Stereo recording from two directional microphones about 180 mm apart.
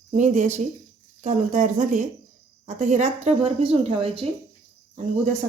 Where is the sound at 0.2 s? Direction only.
40° right (ahead or behind).